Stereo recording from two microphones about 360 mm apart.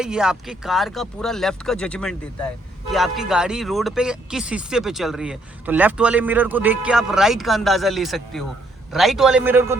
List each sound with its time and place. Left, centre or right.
0.0 s speech: centre